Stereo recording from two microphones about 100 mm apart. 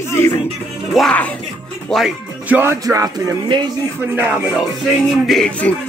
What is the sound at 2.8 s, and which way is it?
Speech, 35° right (ahead or behind).